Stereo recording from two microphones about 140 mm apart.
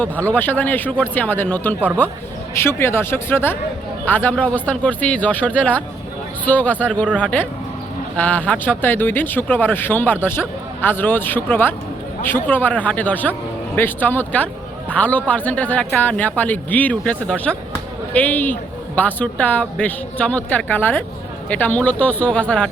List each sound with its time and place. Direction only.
0.0 s a man's voice: 10° left (ahead or behind)